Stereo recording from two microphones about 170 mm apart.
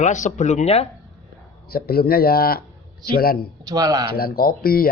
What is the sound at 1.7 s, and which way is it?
Speech, 65° left (ahead or behind).